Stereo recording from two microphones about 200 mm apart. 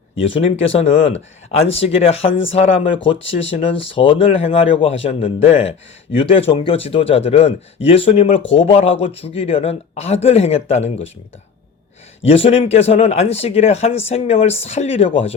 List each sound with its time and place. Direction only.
0.3 s speech: 30° left (ahead or behind)
3.2 s speech: 70° left (ahead or behind)
4.0 s speech: 25° left (ahead or behind)
12.2 s speech: 30° left (ahead or behind)